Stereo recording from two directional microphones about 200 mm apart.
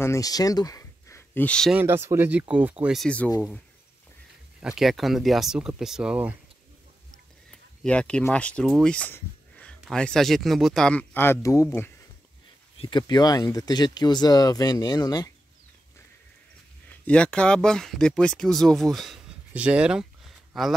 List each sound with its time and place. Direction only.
0.0 s speech: 15° left (ahead or behind)
1.8 s speech: 10° right (ahead or behind)
4.6 s speech: 5° right (ahead or behind)
7.8 s speech: 5° left (ahead or behind)
12.7 s speech: 25° left (ahead or behind)
17.0 s speech: 5° left (ahead or behind)